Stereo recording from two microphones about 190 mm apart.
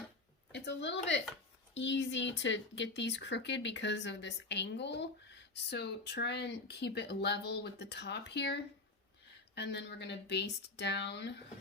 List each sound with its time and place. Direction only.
0.5 s a woman's voice: 65° left (ahead or behind)